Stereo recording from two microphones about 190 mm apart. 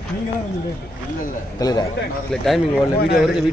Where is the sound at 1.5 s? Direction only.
20° left (ahead or behind).